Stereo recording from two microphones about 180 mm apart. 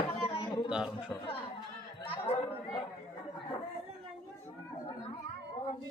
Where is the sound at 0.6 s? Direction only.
5° right (ahead or behind).